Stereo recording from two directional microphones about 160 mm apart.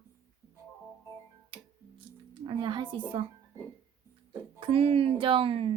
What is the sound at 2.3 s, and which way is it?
Speech, 30° right (ahead or behind).